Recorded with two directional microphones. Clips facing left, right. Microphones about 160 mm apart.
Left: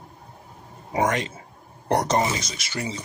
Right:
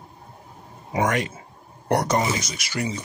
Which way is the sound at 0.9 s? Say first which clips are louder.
Even; 25° left (ahead or behind).